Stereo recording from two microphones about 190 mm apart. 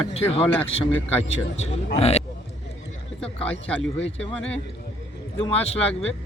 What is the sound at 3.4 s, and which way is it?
Speech, 30° left (ahead or behind).